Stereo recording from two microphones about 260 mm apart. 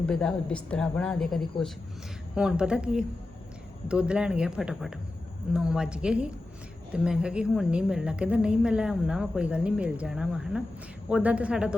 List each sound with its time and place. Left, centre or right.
0.0 s a woman's voice: centre